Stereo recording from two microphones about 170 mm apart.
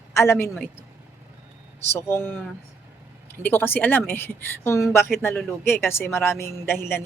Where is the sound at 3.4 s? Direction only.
10° left (ahead or behind).